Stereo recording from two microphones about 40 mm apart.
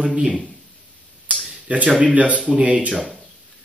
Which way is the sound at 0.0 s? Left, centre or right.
Right.